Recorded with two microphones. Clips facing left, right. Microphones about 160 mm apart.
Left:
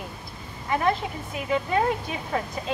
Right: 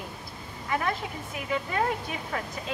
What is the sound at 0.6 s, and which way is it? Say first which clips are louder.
Speech: left 5 dB; 25° left (ahead or behind).